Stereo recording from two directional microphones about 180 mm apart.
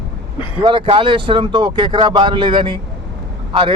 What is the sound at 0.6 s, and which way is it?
Speech, 30° right (ahead or behind).